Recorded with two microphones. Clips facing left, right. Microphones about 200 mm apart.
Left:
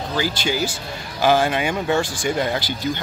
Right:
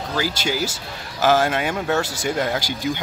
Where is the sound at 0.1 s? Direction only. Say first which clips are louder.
Left 1 dB; 5° right (ahead or behind).